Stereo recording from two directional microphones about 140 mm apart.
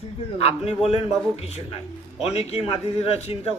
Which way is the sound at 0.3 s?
45° left (ahead or behind).